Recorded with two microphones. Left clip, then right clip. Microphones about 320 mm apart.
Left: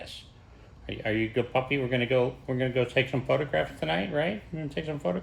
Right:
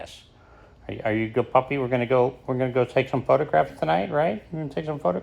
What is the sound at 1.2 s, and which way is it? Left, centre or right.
Speech, right.